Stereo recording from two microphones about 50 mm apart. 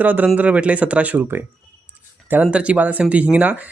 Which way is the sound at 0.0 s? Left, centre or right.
Right.